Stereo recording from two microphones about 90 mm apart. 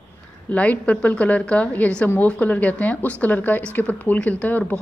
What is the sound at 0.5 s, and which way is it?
Speech, 15° left (ahead or behind).